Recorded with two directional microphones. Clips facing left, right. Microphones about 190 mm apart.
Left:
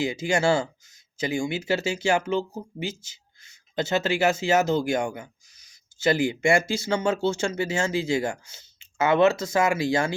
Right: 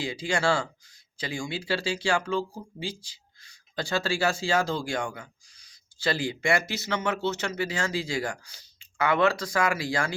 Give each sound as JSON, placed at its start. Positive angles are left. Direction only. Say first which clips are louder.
{"t": 0.0, "sound": "speech", "louder": "left 4 dB", "side_deg": 25}